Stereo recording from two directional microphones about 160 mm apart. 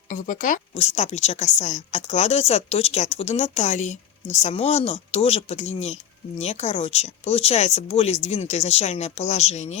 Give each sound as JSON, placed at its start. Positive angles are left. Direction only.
{"t": 0.1, "sound": "a woman's voice", "side_deg": 55}